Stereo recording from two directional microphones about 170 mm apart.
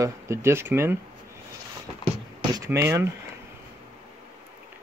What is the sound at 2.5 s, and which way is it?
Speech, 15° right (ahead or behind).